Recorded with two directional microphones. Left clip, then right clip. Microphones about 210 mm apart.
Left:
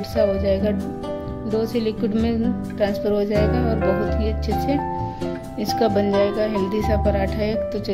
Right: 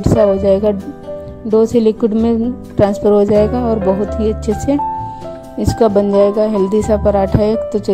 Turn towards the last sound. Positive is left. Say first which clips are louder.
# right 8 dB
turn(degrees=-35)  # may be behind; listen again after turning